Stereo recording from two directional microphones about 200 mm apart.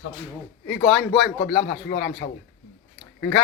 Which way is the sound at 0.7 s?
Centre (ahead or behind).